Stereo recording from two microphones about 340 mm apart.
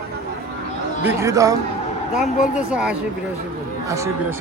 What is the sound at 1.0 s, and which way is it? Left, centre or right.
Speech, centre.